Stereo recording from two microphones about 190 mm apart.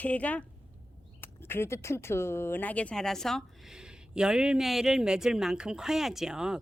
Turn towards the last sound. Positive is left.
turn(degrees=-5)  # may be behind; listen again after turning